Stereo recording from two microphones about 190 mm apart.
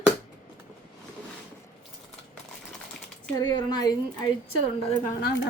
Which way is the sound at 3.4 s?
20° left (ahead or behind).